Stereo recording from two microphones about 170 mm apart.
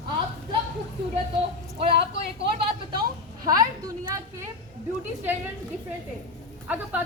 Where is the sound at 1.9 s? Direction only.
75° right (ahead or behind).